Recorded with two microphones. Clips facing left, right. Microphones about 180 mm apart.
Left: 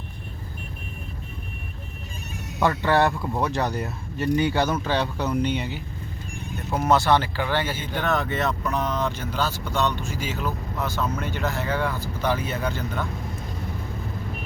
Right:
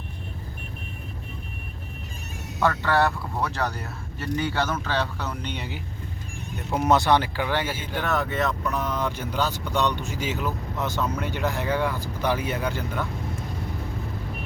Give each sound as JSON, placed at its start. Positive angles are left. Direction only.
{"t": 2.6, "sound": "speech", "side_deg": 15}
{"t": 6.7, "sound": "speech", "side_deg": -20}